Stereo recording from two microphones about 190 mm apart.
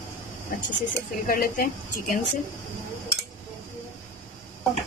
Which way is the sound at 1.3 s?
50° left (ahead or behind).